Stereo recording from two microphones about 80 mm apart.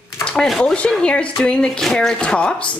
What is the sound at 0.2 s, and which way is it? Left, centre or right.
Speech, centre.